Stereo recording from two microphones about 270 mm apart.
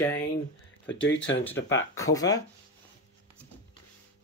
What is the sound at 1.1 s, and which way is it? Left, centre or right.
Speech, left.